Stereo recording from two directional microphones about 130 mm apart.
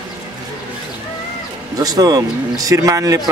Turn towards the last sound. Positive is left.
turn(degrees=-25)  # may be behind; listen again after turning